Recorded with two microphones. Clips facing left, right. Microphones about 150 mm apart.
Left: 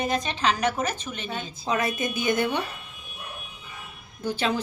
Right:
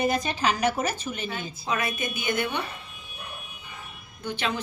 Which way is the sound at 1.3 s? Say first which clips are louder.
Left 6 dB; 35° left (ahead or behind).